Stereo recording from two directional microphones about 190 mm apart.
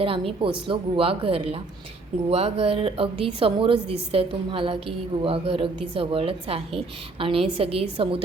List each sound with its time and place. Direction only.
0.0 s a woman's voice: 30° right (ahead or behind)